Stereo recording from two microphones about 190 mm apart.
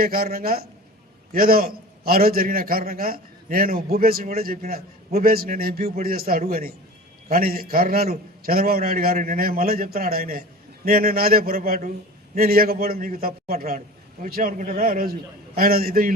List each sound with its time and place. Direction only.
0.0 s a man's voice: 50° right (ahead or behind)